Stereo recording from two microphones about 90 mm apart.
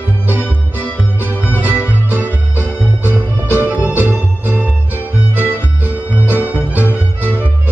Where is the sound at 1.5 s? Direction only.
20° right (ahead or behind).